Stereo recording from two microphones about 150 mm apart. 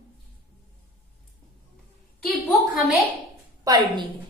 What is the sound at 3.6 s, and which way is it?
Speech, 30° right (ahead or behind).